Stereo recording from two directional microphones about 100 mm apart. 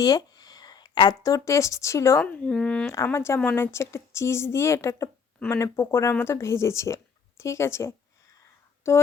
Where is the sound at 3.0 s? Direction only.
25° left (ahead or behind).